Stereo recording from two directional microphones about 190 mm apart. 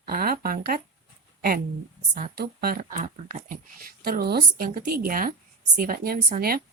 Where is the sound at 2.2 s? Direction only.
50° right (ahead or behind).